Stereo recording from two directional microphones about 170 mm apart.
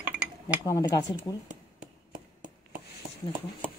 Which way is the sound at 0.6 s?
20° left (ahead or behind).